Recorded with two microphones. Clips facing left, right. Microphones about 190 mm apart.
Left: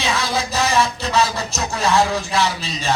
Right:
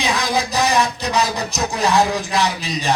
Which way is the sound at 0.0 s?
15° right (ahead or behind).